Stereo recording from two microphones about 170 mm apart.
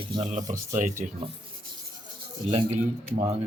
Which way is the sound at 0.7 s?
45° right (ahead or behind).